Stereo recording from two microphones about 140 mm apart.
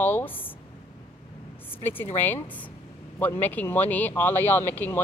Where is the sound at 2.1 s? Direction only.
15° left (ahead or behind).